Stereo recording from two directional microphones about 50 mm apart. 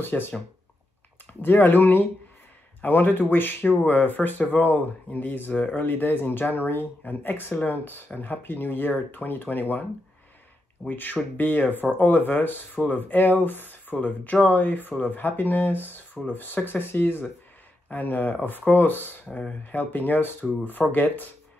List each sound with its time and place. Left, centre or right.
0.0 s speech: left
1.4 s speech: left
10.9 s speech: left